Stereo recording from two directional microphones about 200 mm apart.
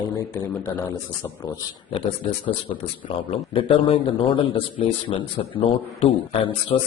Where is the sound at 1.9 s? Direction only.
25° left (ahead or behind).